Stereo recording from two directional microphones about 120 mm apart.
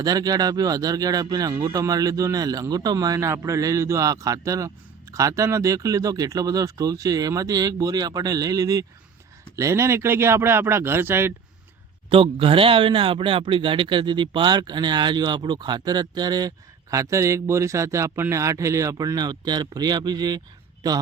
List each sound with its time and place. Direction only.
0.0 s speech: 30° right (ahead or behind)
12.0 s speech: 45° right (ahead or behind)